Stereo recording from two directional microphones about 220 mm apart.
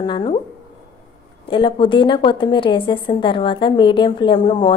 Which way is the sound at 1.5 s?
25° left (ahead or behind).